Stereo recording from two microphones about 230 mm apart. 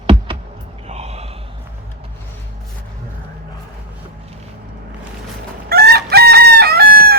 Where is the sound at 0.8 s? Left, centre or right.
Right.